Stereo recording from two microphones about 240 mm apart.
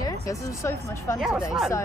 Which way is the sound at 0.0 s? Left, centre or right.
Centre.